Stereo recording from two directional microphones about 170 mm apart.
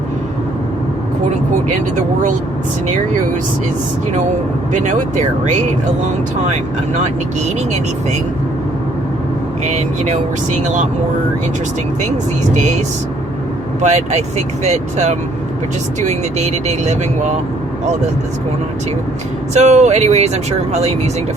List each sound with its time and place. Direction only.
4.7 s speech: 45° right (ahead or behind)
9.6 s speech: 40° right (ahead or behind)
13.8 s speech: 40° right (ahead or behind)
19.5 s speech: 40° right (ahead or behind)